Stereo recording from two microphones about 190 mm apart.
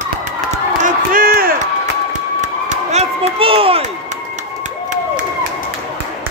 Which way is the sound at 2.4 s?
35° right (ahead or behind).